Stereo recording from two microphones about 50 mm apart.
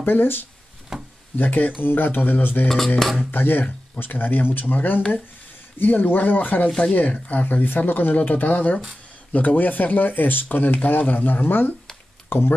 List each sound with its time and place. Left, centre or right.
0.0 s speech: left
0.9 s a sound: centre
1.4 s speech: left
3.0 s speech: centre
3.3 s speech: left